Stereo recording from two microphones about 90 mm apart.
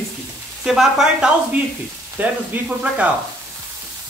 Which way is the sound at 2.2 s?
15° right (ahead or behind).